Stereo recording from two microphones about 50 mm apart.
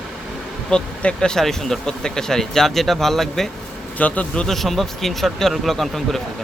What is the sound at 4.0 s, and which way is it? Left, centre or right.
Speech, left.